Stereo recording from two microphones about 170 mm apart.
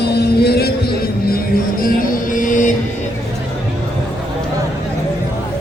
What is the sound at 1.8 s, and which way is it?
Music, 55° left (ahead or behind).